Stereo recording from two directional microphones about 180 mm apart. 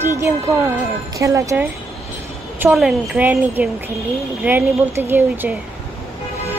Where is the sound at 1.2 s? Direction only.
15° right (ahead or behind).